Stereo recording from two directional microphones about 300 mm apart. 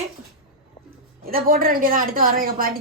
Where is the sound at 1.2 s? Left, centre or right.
Right.